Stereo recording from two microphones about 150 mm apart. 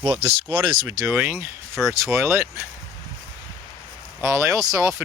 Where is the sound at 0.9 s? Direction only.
15° right (ahead or behind).